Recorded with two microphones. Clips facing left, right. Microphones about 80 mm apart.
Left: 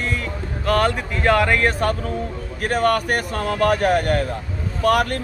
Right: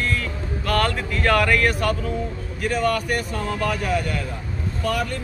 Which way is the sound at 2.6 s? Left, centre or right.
Left.